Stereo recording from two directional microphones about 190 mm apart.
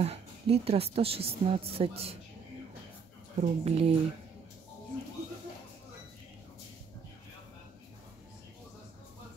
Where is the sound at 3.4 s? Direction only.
35° right (ahead or behind).